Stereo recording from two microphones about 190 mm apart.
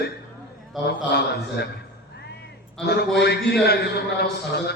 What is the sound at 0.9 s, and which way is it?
Mantra, 60° left (ahead or behind).